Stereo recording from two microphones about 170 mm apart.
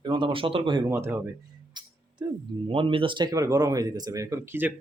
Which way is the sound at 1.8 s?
25° right (ahead or behind).